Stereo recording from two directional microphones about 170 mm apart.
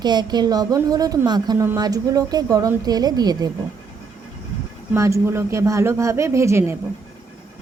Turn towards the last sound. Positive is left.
turn(degrees=-15)  # may be behind; listen again after turning